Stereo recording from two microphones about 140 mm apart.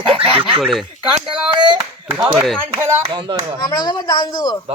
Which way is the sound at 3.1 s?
35° right (ahead or behind).